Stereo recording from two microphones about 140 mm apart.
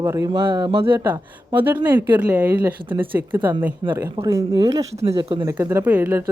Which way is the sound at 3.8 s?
35° right (ahead or behind).